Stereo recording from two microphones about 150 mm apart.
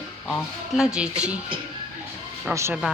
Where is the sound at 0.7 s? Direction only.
5° right (ahead or behind).